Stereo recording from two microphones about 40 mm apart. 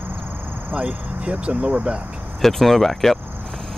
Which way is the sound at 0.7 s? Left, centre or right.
Right.